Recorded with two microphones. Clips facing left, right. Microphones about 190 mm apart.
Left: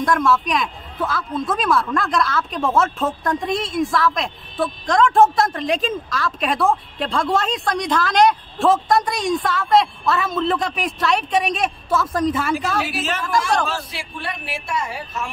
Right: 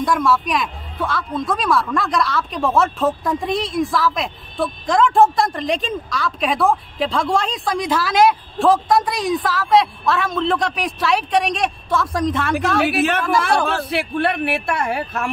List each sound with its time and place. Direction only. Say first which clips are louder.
0.0 s speech: even; centre (ahead or behind)
12.8 s a man's voice: right 7 dB; 60° right (ahead or behind)